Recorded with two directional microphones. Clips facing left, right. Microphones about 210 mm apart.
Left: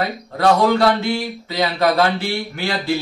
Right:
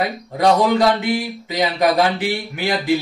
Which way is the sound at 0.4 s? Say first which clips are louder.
Even; 15° right (ahead or behind).